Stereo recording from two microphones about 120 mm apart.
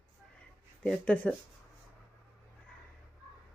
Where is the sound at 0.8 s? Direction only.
10° left (ahead or behind).